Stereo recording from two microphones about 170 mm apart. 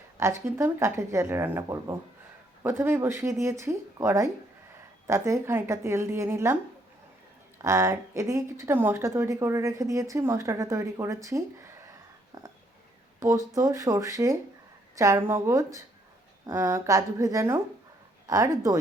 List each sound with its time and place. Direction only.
0.2 s a woman's voice: 15° right (ahead or behind)
7.6 s a woman's voice: 15° right (ahead or behind)
13.1 s a woman's voice: 20° right (ahead or behind)